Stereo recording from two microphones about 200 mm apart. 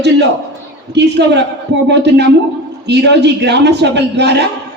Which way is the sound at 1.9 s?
60° right (ahead or behind).